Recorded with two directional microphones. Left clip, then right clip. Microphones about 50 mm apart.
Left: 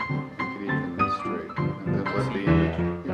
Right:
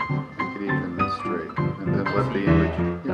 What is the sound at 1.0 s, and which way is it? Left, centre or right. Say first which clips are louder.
Music: right 1 dB; right.